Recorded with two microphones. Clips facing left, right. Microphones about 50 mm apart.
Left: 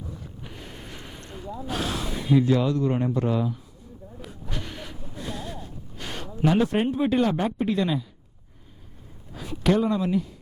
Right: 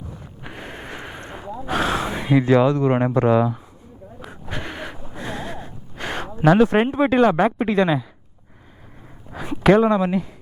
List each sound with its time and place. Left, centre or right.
0.4 s a sound: right
1.2 s gasp: right
1.6 s speech: right
4.3 s gasp: right
6.4 s speech: right
9.3 s a sound: right
9.8 s speech: right